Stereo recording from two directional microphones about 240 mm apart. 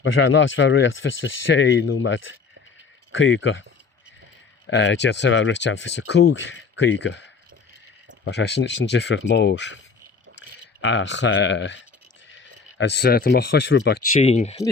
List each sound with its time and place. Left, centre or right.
0.0 s speech: left
4.6 s speech: left